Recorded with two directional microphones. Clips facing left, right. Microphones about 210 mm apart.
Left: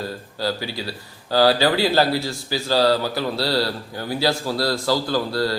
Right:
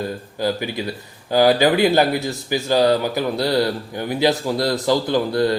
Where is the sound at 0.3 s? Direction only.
15° right (ahead or behind).